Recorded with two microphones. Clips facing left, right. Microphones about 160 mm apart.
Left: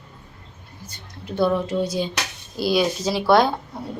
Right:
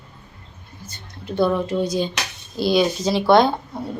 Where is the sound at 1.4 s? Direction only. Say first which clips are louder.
Right 1 dB; 10° left (ahead or behind).